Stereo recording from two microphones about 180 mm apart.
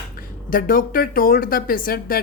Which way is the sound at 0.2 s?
50° left (ahead or behind).